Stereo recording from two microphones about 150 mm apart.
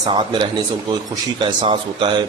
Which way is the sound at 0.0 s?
30° right (ahead or behind).